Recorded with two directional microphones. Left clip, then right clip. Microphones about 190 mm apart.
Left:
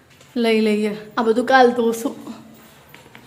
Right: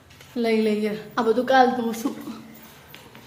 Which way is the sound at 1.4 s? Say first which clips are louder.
Left 5 dB; 35° left (ahead or behind).